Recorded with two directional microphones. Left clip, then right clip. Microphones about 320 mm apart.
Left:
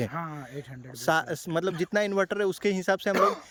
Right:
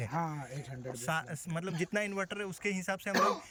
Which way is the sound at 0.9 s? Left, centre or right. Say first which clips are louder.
Left 11 dB; centre.